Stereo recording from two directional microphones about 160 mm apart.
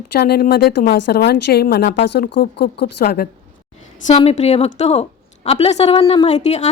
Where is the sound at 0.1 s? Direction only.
85° left.